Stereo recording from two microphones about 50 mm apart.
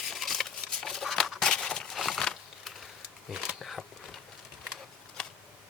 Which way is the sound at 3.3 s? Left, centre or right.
Centre.